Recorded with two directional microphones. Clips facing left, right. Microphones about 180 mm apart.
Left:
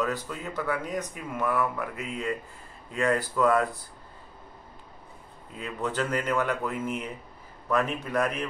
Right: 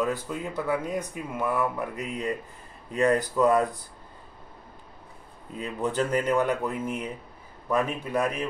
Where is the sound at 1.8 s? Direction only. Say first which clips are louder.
Right 2 dB; 35° right (ahead or behind).